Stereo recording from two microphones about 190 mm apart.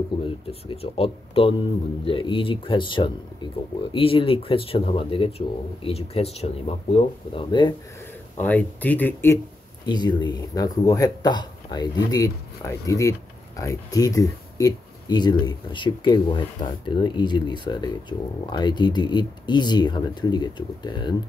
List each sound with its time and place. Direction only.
0.5 s speech: 30° left (ahead or behind)
8.4 s speech: 10° left (ahead or behind)
9.8 s speech: 25° left (ahead or behind)